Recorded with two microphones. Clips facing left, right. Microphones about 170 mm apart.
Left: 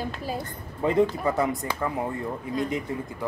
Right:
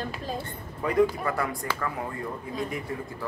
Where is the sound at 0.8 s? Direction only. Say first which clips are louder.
Left 1 dB; 25° left (ahead or behind).